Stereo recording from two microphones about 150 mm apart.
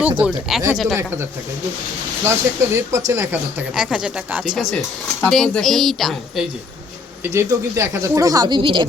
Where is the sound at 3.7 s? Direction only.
5° right (ahead or behind).